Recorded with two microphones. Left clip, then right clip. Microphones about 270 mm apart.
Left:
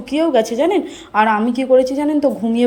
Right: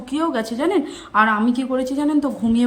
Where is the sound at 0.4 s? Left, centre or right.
Right.